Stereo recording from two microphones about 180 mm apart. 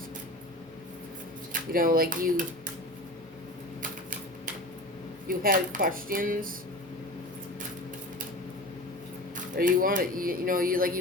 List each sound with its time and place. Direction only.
1.7 s speech: 50° right (ahead or behind)
5.3 s speech: 50° right (ahead or behind)
9.3 s speech: 50° right (ahead or behind)